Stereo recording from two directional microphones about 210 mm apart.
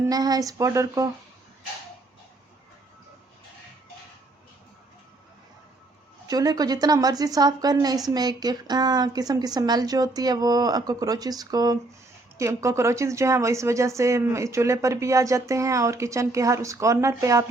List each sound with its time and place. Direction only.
0.0 s a woman's voice: 15° right (ahead or behind)
6.2 s a woman's voice: 15° right (ahead or behind)